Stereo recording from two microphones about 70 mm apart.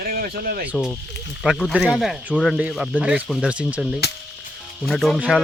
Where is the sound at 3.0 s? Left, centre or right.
Centre.